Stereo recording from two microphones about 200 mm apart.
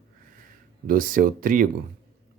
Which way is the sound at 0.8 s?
40° right (ahead or behind).